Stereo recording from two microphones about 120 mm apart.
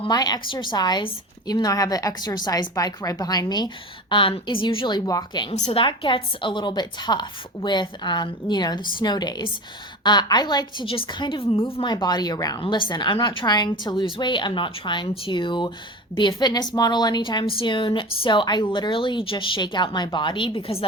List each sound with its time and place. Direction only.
0.1 s a woman's voice: 35° left (ahead or behind)
5.5 s a woman's voice: 65° left (ahead or behind)
5.8 s a woman's voice: 45° left (ahead or behind)
10.8 s a woman's voice: 45° left (ahead or behind)
12.5 s a woman's voice: 45° left (ahead or behind)